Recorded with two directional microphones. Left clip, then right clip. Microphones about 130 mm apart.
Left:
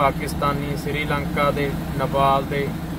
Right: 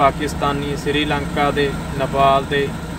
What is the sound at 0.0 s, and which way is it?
Speech, 15° right (ahead or behind).